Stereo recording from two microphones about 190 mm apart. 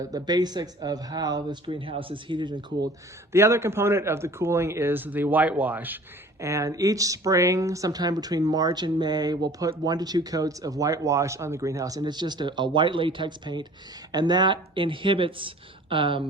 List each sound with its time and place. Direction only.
0.0 s speech: 20° right (ahead or behind)
3.3 s speech: 15° right (ahead or behind)